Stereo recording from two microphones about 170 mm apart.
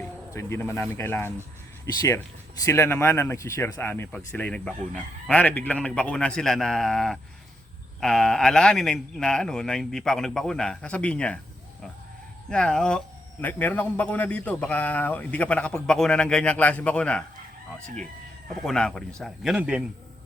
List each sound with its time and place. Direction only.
0.3 s a man's voice: 15° left (ahead or behind)
12.5 s a man's voice: 5° left (ahead or behind)
18.6 s speech: 5° left (ahead or behind)